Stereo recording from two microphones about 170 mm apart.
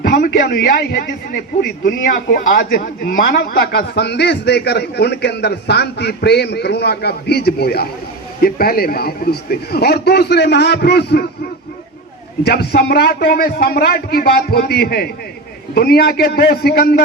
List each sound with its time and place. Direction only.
0.0 s a man's voice: 65° left (ahead or behind)
12.5 s a man's voice: 70° left (ahead or behind)